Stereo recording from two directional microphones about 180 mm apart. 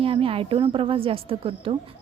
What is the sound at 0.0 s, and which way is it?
A woman's voice, 30° right (ahead or behind).